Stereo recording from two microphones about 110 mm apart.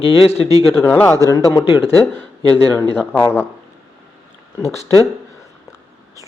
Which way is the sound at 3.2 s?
20° left (ahead or behind).